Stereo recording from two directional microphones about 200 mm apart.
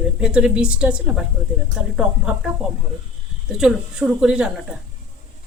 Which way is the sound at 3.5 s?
5° right (ahead or behind).